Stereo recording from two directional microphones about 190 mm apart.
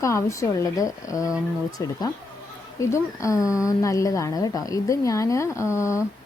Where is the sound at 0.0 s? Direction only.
15° left (ahead or behind).